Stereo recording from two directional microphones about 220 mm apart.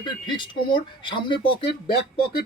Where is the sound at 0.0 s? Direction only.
20° left (ahead or behind).